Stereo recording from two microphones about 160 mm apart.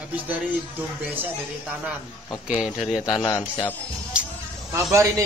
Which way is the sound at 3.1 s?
25° left (ahead or behind).